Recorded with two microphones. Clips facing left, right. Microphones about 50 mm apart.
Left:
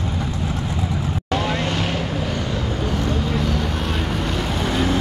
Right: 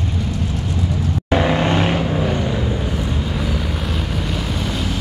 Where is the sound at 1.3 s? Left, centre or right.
Right.